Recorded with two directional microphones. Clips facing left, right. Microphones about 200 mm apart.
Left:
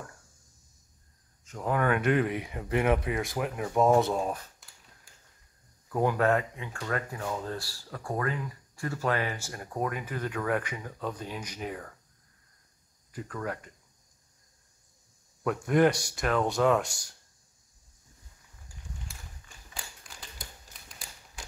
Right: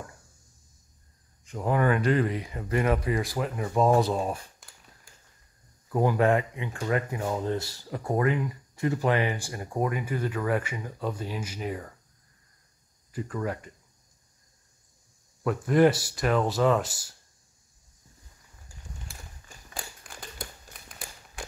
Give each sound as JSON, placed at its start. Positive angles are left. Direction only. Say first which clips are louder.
{"t": 1.4, "sound": "speech", "louder": "right 3 dB", "side_deg": -10}
{"t": 5.9, "sound": "speech", "louder": "right 2 dB", "side_deg": -10}
{"t": 13.1, "sound": "speech", "louder": "right 4 dB", "side_deg": -5}
{"t": 15.4, "sound": "speech", "louder": "right 3 dB", "side_deg": 0}
{"t": 19.7, "sound": "a sound", "louder": "right 5 dB", "side_deg": -50}
{"t": 20.7, "sound": "typewriter", "louder": "right 4 dB", "side_deg": -50}
{"t": 21.4, "sound": "a sound", "louder": "right 7 dB", "side_deg": -60}